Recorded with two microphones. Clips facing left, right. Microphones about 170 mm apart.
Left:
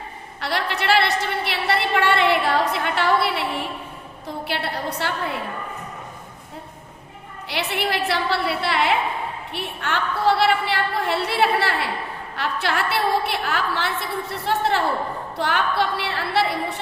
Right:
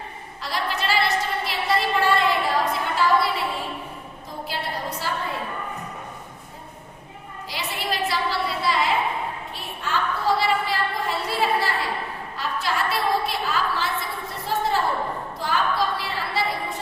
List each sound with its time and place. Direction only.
0.3 s a sound: 70° left (ahead or behind)
4.3 s a woman's voice: 70° left (ahead or behind)
7.4 s a woman's voice: 70° left (ahead or behind)